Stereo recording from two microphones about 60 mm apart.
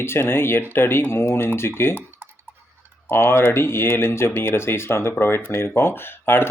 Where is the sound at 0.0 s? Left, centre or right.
Left.